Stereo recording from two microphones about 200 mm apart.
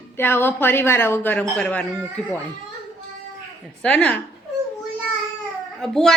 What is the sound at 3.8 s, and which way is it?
Speech, 5° left (ahead or behind).